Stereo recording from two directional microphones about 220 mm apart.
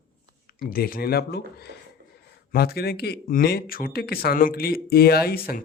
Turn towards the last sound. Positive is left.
turn(degrees=45)  # may be behind; listen again after turning